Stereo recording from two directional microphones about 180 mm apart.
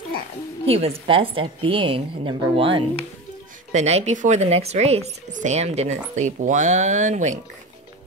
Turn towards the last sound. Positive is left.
turn(degrees=-40)  # may be behind; listen again after turning